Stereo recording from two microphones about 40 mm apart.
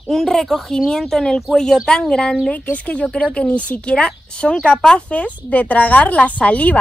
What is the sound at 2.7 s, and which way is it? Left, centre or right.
Speech, left.